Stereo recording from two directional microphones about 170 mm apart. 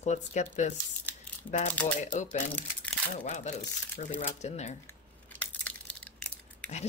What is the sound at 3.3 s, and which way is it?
Speech, 45° left (ahead or behind).